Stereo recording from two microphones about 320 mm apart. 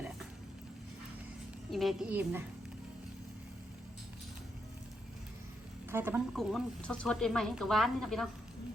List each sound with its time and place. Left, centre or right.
1.7 s speech: centre
5.9 s speech: centre